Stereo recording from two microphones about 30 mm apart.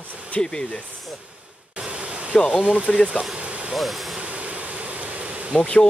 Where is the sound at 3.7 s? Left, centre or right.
Centre.